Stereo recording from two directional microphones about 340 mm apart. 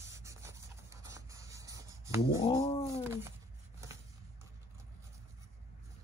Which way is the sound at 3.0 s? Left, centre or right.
Centre.